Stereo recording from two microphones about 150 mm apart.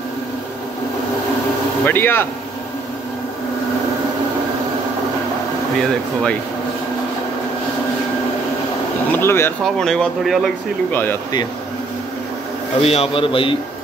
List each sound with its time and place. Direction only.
1.9 s speech: 15° left (ahead or behind)
5.8 s speech: 5° left (ahead or behind)
9.1 s speech: 15° left (ahead or behind)
9.8 s speech: 5° left (ahead or behind)
10.9 s speech: 15° left (ahead or behind)
12.8 s a man's voice: 40° left (ahead or behind)